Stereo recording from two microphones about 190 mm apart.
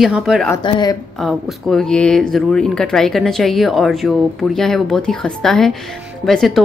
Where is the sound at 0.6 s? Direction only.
20° left (ahead or behind).